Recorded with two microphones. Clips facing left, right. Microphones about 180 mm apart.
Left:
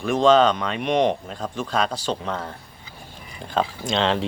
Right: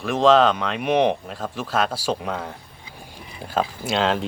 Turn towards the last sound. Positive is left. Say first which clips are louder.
# even
turn(degrees=-5)  # may be behind; listen again after turning